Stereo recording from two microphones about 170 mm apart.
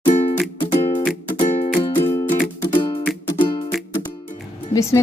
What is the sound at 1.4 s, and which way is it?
Music, 45° left (ahead or behind).